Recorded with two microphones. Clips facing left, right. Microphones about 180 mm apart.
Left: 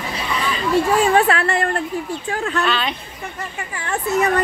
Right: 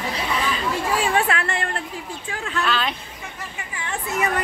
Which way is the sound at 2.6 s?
Centre (ahead or behind).